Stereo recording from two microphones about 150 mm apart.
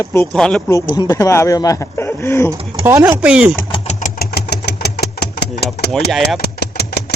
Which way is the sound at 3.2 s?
5° right (ahead or behind).